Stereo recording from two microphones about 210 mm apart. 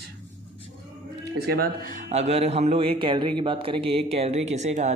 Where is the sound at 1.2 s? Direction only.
50° right (ahead or behind).